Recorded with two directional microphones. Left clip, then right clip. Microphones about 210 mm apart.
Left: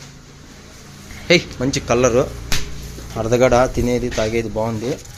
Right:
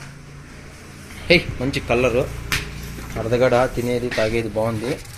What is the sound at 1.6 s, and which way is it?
Speech, 25° left (ahead or behind).